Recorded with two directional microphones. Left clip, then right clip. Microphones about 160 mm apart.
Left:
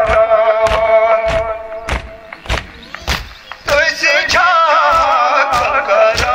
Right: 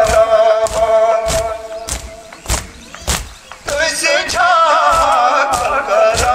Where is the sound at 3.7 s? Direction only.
50° right (ahead or behind).